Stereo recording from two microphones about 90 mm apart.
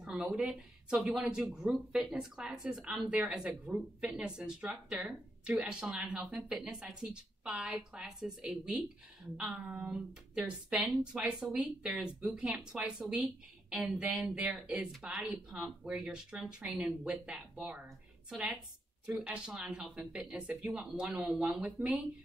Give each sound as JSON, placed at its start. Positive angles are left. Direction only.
{"t": 0.0, "sound": "a sound", "side_deg": -5}
{"t": 0.4, "sound": "speech", "side_deg": -5}
{"t": 19.0, "sound": "speech", "side_deg": -10}